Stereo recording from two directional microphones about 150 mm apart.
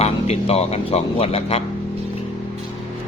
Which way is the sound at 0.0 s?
45° left (ahead or behind).